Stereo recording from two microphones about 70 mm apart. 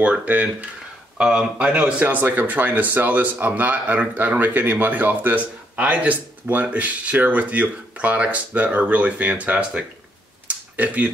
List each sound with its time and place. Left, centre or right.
0.0 s speech: right